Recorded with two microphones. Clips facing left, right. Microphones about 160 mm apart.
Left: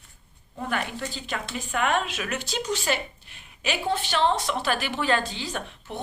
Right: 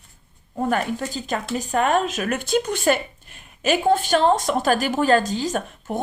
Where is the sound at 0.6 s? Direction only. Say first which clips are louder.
Right 7 dB; 45° right (ahead or behind).